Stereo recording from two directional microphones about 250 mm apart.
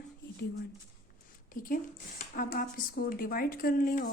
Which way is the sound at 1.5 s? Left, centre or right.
Left.